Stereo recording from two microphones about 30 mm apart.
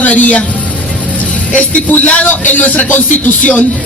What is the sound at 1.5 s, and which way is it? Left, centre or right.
Speech, left.